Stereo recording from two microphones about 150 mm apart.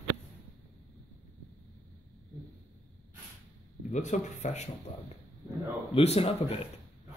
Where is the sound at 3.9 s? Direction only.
55° left (ahead or behind).